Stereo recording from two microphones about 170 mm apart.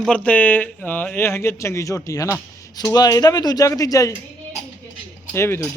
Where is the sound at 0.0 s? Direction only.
5° left (ahead or behind).